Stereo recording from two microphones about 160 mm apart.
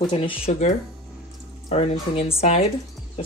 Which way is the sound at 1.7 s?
40° left (ahead or behind).